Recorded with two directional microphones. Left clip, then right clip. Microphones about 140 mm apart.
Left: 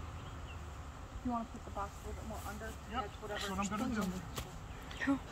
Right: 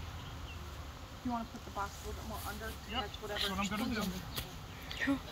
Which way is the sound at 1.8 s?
25° left (ahead or behind).